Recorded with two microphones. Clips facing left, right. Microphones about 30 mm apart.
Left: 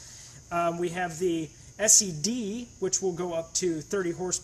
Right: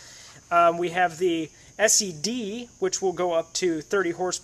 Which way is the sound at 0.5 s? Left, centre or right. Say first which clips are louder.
Right 8 dB; right.